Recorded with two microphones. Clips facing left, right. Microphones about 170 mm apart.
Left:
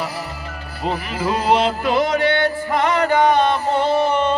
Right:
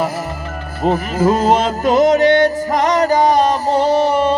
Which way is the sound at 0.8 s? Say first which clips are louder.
Right 8 dB; 45° right (ahead or behind).